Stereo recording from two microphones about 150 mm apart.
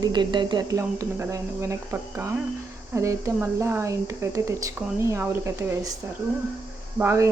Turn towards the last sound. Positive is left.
turn(degrees=-20)  # may be behind; listen again after turning